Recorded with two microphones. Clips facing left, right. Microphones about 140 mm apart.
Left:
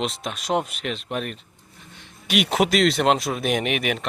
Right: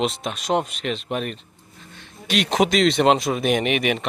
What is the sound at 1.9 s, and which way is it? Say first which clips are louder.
Speech: even; 10° left (ahead or behind).